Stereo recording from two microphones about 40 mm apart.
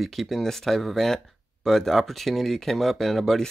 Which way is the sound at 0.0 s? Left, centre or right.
Centre.